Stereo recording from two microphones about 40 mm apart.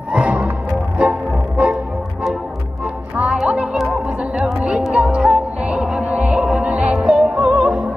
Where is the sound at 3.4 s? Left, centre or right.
Right.